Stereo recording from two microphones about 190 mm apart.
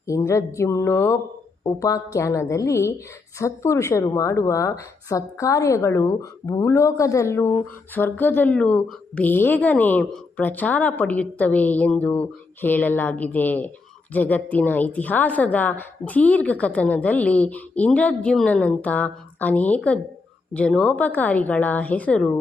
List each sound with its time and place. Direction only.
0.1 s speech: 15° left (ahead or behind)